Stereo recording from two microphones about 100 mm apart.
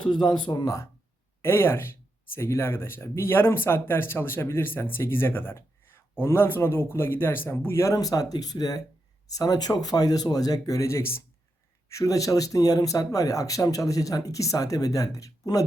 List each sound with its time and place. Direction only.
0.0 s speech: 50° left (ahead or behind)
1.4 s speech: 25° left (ahead or behind)